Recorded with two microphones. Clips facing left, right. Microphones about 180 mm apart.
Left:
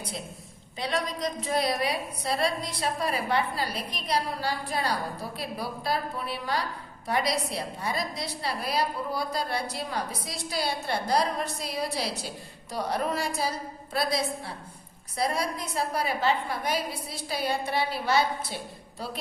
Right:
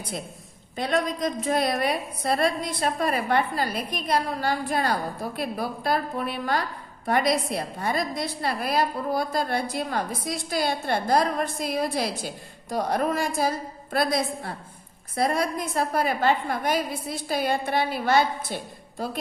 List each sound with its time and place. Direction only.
0.8 s a woman's voice: 50° right (ahead or behind)